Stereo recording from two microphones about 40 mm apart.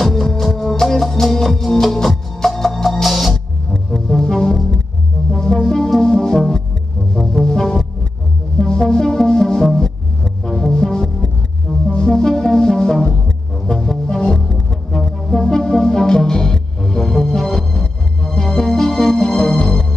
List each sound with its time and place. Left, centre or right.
0.0 s music: centre
3.7 s music: centre